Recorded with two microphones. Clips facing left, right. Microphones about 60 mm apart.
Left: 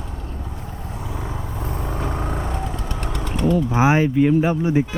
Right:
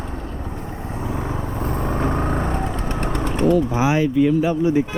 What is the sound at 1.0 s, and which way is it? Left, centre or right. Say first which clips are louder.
Vehicle: right 5 dB; right.